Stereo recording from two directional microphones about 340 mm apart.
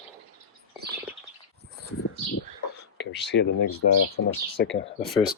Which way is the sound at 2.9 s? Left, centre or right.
Left.